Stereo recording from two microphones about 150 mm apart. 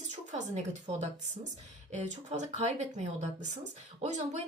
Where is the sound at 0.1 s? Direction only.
55° right (ahead or behind).